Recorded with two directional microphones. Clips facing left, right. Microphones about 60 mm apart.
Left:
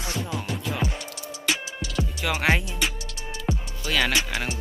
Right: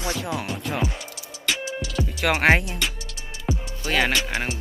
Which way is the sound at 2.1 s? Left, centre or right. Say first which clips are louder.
Right 5 dB; right.